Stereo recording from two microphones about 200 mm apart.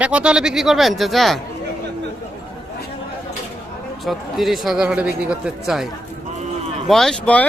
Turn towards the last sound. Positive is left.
turn(degrees=5)  # may be behind; listen again after turning